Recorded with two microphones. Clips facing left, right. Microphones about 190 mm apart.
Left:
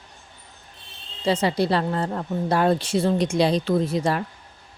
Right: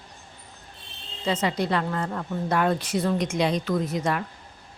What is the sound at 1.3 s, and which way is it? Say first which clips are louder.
A woman's voice: left 4 dB; 35° left (ahead or behind).